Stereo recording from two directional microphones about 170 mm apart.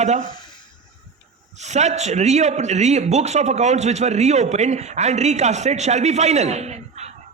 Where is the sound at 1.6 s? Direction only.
40° right (ahead or behind).